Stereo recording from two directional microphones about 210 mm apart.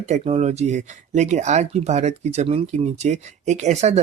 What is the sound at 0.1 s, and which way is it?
Speech, 30° right (ahead or behind).